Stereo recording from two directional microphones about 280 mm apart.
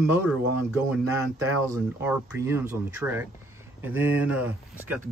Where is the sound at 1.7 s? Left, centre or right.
Centre.